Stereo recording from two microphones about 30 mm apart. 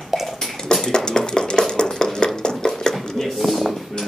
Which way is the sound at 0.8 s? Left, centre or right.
Left.